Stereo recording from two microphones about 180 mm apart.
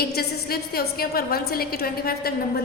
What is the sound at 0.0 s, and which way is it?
A woman's voice, 60° left (ahead or behind).